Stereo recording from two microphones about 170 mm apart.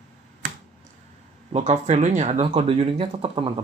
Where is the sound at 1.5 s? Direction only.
45° right (ahead or behind).